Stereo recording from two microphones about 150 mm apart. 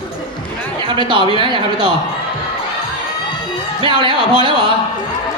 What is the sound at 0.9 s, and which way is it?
Speech, 35° right (ahead or behind).